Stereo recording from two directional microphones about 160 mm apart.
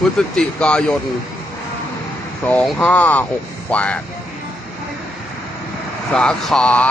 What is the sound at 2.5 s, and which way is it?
Speech, 5° left (ahead or behind).